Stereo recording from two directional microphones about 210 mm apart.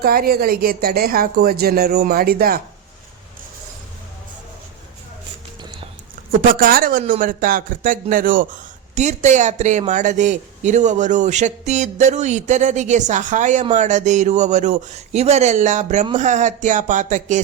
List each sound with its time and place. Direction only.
0.0 s speech: 45° right (ahead or behind)
6.6 s speech: 45° right (ahead or behind)